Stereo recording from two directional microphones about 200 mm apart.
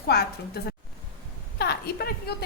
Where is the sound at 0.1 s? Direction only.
50° left (ahead or behind).